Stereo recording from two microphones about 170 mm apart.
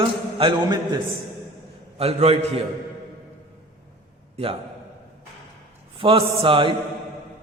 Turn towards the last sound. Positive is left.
turn(degrees=-30)  # may be behind; listen again after turning